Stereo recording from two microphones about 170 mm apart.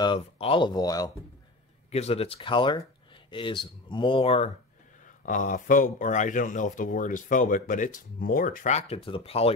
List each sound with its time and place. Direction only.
0.0 s speech: 30° left (ahead or behind)
1.9 s speech: 40° left (ahead or behind)
5.0 s speech: 50° left (ahead or behind)